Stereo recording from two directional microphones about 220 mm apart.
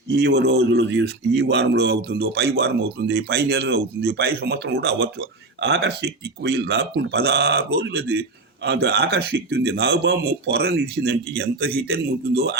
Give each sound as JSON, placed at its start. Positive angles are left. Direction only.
{"t": 0.1, "sound": "speech", "side_deg": -50}